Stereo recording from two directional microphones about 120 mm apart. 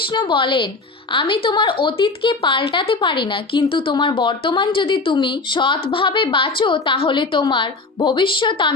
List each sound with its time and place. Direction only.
0.1 s speech: 40° left (ahead or behind)